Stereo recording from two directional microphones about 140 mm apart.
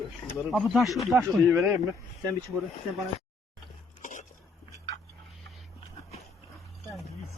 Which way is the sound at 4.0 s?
65° left (ahead or behind).